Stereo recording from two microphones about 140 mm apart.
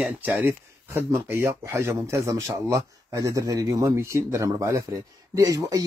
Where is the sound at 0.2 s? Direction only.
15° right (ahead or behind).